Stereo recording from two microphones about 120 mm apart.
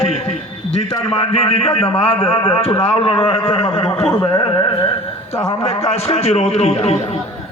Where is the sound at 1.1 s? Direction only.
55° left (ahead or behind).